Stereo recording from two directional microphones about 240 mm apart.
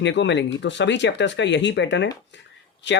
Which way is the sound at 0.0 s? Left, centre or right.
Left.